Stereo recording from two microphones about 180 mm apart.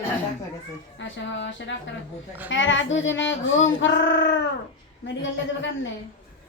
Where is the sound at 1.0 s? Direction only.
90° left.